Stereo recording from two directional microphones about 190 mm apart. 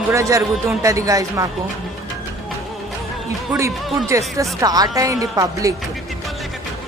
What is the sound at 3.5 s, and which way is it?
Speech, 15° right (ahead or behind).